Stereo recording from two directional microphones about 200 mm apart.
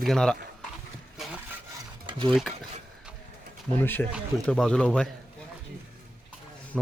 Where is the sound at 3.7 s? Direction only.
10° left (ahead or behind).